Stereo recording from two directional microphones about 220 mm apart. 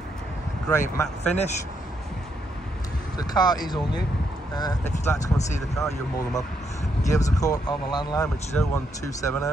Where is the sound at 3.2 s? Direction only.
20° left (ahead or behind).